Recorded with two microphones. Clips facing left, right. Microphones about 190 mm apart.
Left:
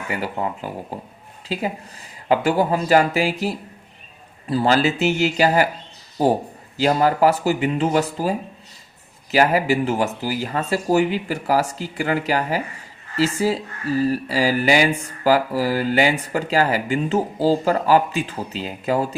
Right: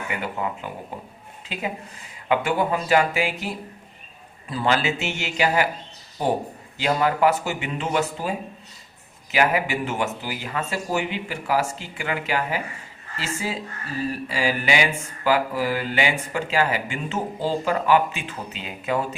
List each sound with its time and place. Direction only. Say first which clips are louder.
0.1 s speech: left 4 dB; 35° left (ahead or behind)
6.7 s speech: left 4 dB; 35° left (ahead or behind)